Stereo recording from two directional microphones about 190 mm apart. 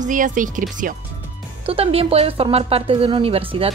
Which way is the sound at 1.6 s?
30° right (ahead or behind).